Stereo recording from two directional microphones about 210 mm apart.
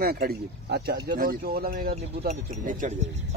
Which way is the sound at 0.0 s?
45° right (ahead or behind).